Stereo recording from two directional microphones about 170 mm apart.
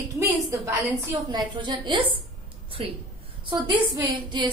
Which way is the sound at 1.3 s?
25° right (ahead or behind).